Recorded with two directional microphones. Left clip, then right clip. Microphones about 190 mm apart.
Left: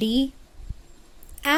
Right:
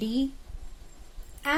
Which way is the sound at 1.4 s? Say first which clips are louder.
Left 5 dB; 45° left (ahead or behind).